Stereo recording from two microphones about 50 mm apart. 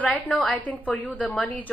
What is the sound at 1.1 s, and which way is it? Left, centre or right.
Speech, left.